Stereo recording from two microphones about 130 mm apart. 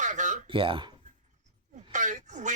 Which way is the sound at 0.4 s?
40° right (ahead or behind).